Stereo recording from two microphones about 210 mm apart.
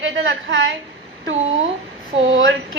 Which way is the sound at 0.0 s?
55° right (ahead or behind).